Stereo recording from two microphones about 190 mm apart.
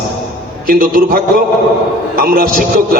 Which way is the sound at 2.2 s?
50° right (ahead or behind).